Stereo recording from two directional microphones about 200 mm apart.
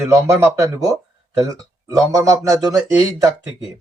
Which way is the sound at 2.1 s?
15° right (ahead or behind).